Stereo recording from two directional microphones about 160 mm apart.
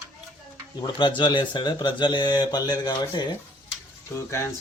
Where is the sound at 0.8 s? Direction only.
30° left (ahead or behind).